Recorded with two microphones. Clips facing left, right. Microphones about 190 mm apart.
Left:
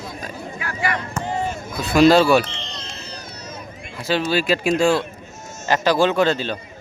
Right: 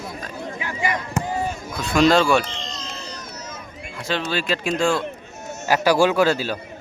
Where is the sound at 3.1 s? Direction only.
30° left (ahead or behind).